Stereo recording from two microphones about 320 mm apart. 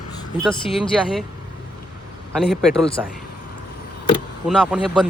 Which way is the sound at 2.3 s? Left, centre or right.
Centre.